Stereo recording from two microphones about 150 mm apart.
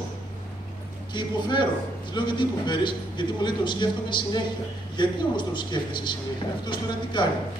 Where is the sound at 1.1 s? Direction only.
30° left (ahead or behind).